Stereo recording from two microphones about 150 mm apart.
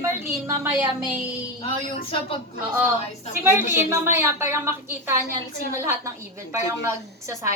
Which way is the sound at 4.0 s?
15° right (ahead or behind).